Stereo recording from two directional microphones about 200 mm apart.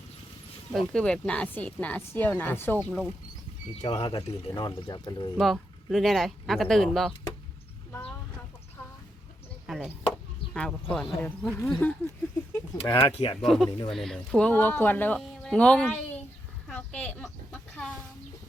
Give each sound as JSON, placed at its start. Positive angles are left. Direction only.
{"t": 0.7, "sound": "speech", "side_deg": 0}
{"t": 2.7, "sound": "speech", "side_deg": 0}
{"t": 3.8, "sound": "speech", "side_deg": 30}
{"t": 5.4, "sound": "speech", "side_deg": 0}
{"t": 9.6, "sound": "chop", "side_deg": 0}
{"t": 11.2, "sound": "speech", "side_deg": 10}
{"t": 12.7, "sound": "speech", "side_deg": 25}
{"t": 13.4, "sound": "speech", "side_deg": 0}
{"t": 13.7, "sound": "speech", "side_deg": 25}
{"t": 13.9, "sound": "speech", "side_deg": 0}
{"t": 16.6, "sound": "a sound", "side_deg": 5}